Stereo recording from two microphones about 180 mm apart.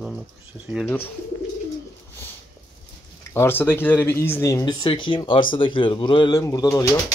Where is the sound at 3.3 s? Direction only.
10° left (ahead or behind).